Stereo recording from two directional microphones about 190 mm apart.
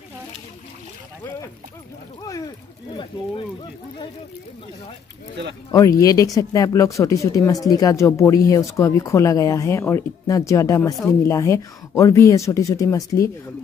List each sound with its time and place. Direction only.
5.7 s speech: 20° left (ahead or behind)